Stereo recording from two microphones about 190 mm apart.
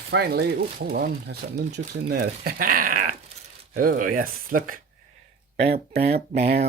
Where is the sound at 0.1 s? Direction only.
60° right (ahead or behind).